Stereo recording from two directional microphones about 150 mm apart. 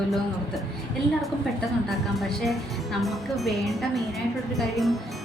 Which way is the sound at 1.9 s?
Centre (ahead or behind).